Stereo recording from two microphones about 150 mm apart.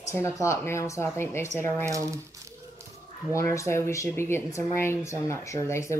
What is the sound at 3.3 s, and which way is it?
Speech, 20° left (ahead or behind).